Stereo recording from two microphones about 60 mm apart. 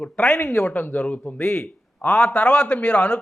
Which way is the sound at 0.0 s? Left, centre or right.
Centre.